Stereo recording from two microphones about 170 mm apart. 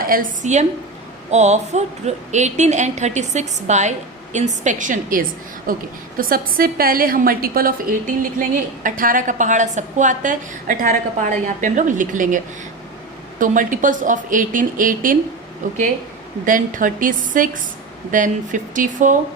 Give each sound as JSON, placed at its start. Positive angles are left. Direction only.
{"t": 0.0, "sound": "a woman's voice", "side_deg": -55}
{"t": 13.4, "sound": "a woman's voice", "side_deg": -50}